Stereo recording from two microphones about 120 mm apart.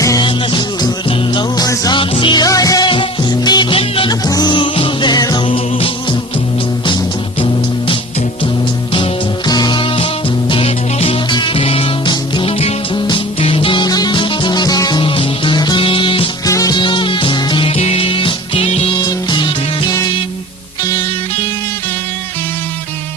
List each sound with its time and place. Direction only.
0.0 s music: 30° left (ahead or behind)
0.3 s music: 40° left (ahead or behind)
2.0 s music: 45° left (ahead or behind)
4.1 s music: 35° left (ahead or behind)
9.5 s music: 35° left (ahead or behind)
16.5 s music: 30° left (ahead or behind); by 18.8 s 55° left (ahead or behind)